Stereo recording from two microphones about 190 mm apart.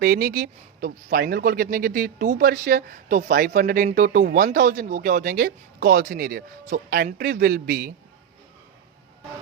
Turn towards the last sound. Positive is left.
turn(degrees=-55)  # may be behind; listen again after turning